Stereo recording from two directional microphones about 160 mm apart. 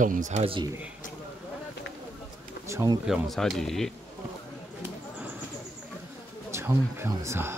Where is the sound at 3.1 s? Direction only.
Centre (ahead or behind).